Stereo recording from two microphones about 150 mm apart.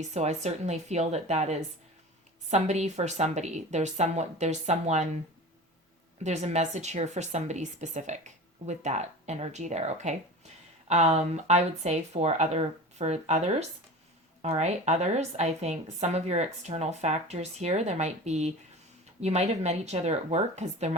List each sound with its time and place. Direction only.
0.1 s a woman's voice: 50° right (ahead or behind)
6.2 s a woman's voice: 50° right (ahead or behind)